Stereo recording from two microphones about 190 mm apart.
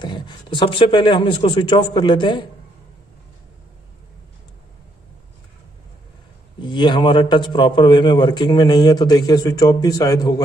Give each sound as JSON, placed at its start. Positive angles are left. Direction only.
{"t": 0.0, "sound": "a man's voice", "side_deg": 25}
{"t": 6.6, "sound": "a man's voice", "side_deg": 25}